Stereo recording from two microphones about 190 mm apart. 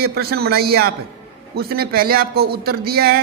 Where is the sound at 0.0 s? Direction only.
55° right (ahead or behind).